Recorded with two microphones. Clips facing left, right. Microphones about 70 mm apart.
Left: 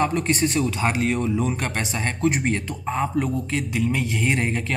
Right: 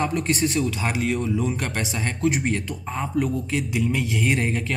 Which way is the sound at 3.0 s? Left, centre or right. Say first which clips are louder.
Right 1 dB; left.